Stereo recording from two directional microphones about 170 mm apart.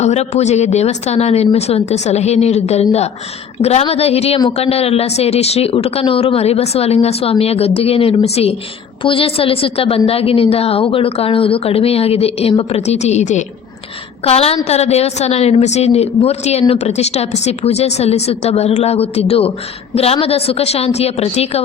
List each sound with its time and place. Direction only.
0.0 s a woman's voice: 40° left (ahead or behind)